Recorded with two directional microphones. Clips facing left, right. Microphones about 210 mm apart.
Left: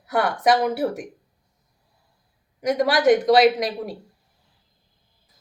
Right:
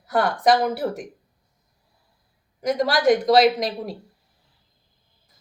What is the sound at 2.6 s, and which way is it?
A woman's voice, 5° left (ahead or behind).